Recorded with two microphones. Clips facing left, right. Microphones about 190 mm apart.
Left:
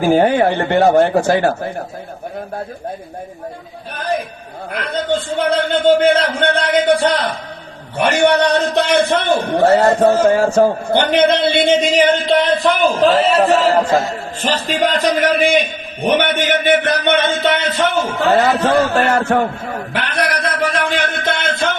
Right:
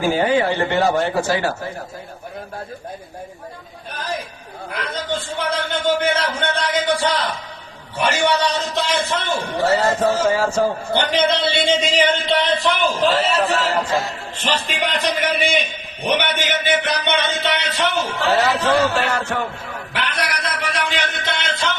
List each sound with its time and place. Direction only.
0.1 s a man's voice: 55° left (ahead or behind)
3.9 s a man's voice: 55° left (ahead or behind)